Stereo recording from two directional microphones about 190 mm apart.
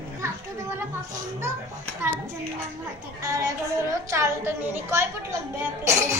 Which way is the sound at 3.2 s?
20° right (ahead or behind).